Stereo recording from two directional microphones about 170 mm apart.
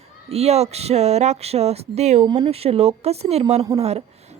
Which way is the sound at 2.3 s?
25° right (ahead or behind).